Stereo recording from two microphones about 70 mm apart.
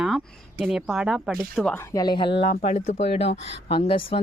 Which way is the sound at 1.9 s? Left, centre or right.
Left.